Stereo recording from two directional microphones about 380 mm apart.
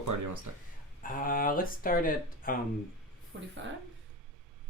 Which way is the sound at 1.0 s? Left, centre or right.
Left.